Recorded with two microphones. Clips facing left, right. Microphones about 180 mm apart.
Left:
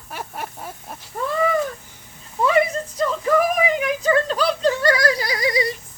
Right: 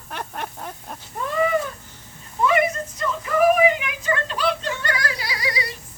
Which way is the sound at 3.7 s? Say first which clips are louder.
Left 7 dB; 35° left (ahead or behind).